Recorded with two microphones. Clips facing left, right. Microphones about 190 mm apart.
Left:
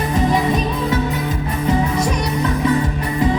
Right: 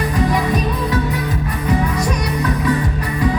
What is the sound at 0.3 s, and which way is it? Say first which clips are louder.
Music: left 1 dB; 25° left (ahead or behind).